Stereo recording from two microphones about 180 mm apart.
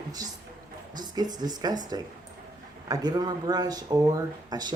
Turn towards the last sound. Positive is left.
turn(degrees=-20)  # may be behind; listen again after turning